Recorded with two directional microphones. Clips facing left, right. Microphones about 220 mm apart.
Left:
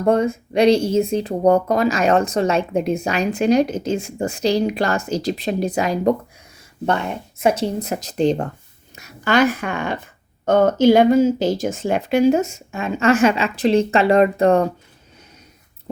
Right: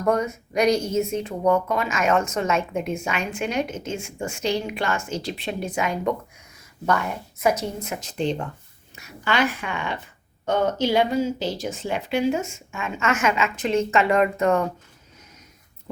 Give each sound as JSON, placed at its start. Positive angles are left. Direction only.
{"t": 0.0, "sound": "speech", "side_deg": 30}